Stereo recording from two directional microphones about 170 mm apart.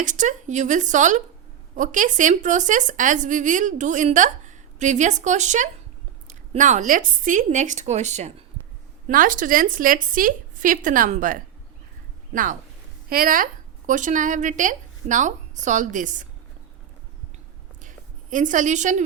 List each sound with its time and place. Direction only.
0.0 s speech: 45° right (ahead or behind)
9.0 s speech: 50° right (ahead or behind)
17.8 s a sound: 50° right (ahead or behind)